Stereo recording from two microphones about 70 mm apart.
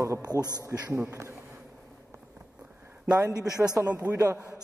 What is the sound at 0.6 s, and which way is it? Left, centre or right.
Speech, right.